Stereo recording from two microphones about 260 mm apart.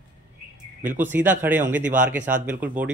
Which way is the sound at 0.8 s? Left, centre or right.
Centre.